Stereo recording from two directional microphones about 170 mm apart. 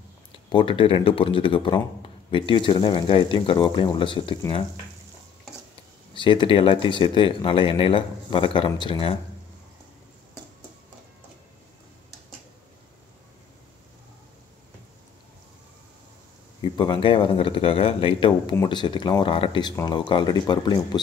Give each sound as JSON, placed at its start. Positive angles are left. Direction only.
{"t": 0.5, "sound": "a man's voice", "side_deg": 30}
{"t": 6.1, "sound": "a man's voice", "side_deg": 30}
{"t": 16.6, "sound": "a man's voice", "side_deg": 25}